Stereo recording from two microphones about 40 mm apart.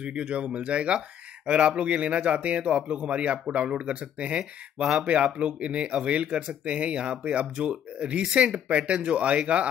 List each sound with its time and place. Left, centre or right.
0.0 s speech: right